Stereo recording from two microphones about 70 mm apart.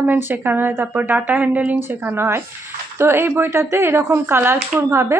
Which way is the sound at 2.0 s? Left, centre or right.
Right.